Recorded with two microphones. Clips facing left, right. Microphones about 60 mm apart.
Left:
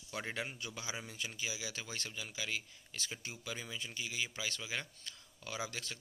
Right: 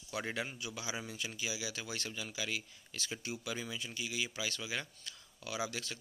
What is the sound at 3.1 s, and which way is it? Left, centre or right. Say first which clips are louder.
Speech: right 5 dB; centre.